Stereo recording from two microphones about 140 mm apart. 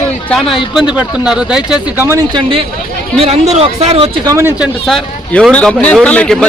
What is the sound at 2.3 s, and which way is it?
Speech, 40° right (ahead or behind).